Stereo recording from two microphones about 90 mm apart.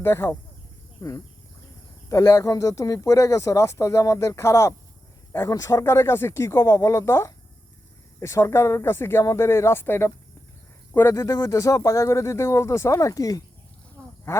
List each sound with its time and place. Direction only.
0.0 s speech: 30° left (ahead or behind)
1.0 s speech: 45° left (ahead or behind); by 10.1 s 25° left (ahead or behind)
11.1 s speech: 40° left (ahead or behind)